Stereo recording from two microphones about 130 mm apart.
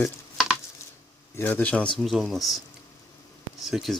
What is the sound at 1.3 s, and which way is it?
Speech, 15° left (ahead or behind).